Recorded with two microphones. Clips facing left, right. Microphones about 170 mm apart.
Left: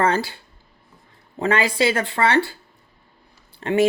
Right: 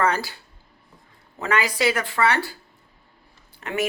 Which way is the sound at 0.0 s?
25° left (ahead or behind).